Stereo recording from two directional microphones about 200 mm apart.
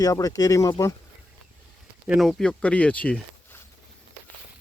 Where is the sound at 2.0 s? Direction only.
Centre (ahead or behind).